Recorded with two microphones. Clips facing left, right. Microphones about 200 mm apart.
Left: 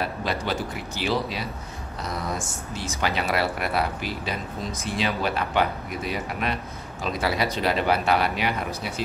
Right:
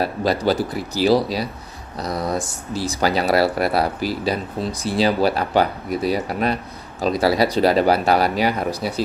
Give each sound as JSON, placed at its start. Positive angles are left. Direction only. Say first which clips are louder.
{"t": 0.0, "sound": "speech", "louder": "right 8 dB", "side_deg": -35}